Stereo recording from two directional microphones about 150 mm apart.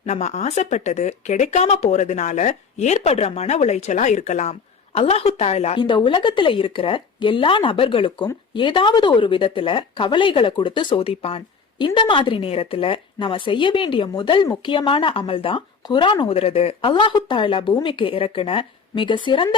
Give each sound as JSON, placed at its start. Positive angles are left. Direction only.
{"t": 0.0, "sound": "speech", "side_deg": 50}
{"t": 5.8, "sound": "speech", "side_deg": 30}
{"t": 16.3, "sound": "speech", "side_deg": 40}